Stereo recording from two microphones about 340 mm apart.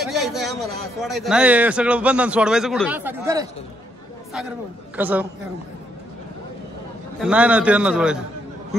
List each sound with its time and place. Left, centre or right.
0.0 s a man's voice: centre
4.9 s a man's voice: centre
7.2 s a man's voice: centre